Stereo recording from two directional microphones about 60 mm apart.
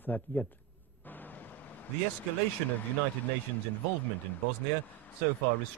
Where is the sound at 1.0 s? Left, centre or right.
Left.